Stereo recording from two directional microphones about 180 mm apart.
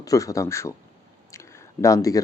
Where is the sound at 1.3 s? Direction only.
15° left (ahead or behind).